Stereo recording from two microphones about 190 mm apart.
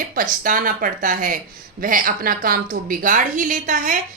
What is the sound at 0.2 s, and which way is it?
A woman's voice, 45° right (ahead or behind).